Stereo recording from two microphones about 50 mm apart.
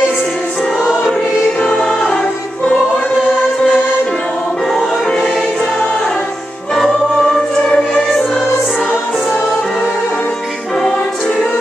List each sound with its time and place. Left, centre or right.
1.6 s choir: centre
7.2 s music: centre